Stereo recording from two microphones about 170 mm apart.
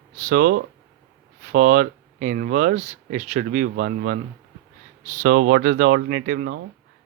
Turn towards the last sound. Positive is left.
turn(degrees=-65)  # may be behind; listen again after turning